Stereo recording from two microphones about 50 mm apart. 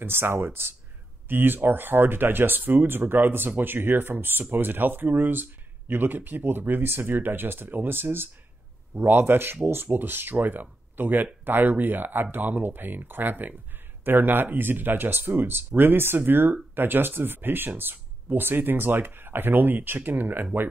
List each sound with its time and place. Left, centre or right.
0.0 s speech: right